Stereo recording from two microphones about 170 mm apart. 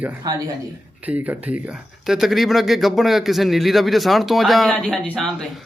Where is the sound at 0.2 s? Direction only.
20° right (ahead or behind).